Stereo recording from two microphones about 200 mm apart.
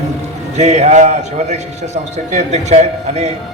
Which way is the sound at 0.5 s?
35° right (ahead or behind).